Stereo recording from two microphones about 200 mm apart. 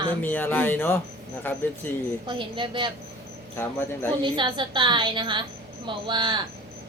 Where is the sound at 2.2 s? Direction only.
25° right (ahead or behind).